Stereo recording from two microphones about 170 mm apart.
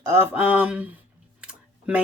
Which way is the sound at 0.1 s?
10° right (ahead or behind).